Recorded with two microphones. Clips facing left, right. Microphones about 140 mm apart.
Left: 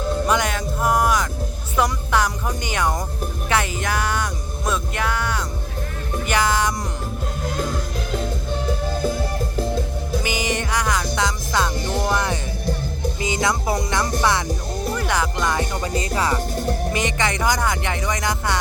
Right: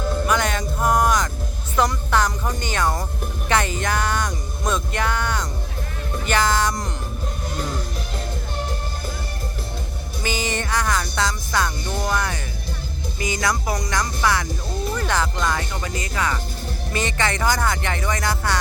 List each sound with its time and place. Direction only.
0.3 s music: 10° left (ahead or behind)
10.2 s music: 15° left (ahead or behind)
14.9 s music: 10° left (ahead or behind)
15.8 s music: 30° left (ahead or behind)
16.9 s speech: 15° left (ahead or behind)